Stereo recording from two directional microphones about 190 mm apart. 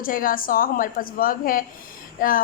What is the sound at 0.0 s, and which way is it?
A woman's voice, 45° left (ahead or behind).